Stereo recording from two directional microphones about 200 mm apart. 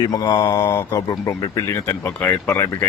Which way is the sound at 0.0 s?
20° left (ahead or behind).